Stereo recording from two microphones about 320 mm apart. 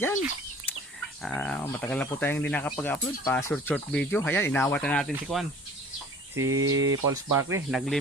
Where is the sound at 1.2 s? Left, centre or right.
Centre.